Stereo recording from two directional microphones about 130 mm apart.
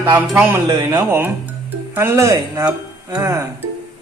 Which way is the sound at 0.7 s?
30° right (ahead or behind).